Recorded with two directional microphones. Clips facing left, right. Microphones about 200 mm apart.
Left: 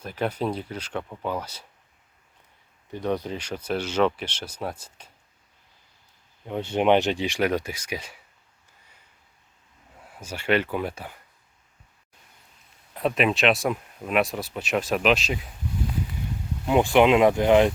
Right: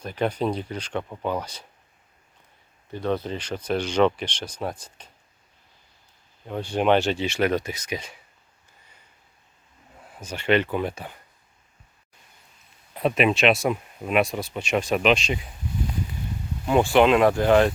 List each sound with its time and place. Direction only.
0.0 s speech: 5° left (ahead or behind)
2.9 s speech: 15° left (ahead or behind)
6.5 s speech: 20° left (ahead or behind)
10.2 s speech: 10° left (ahead or behind)
12.9 s speech: centre (ahead or behind)
16.6 s speech: 15° left (ahead or behind)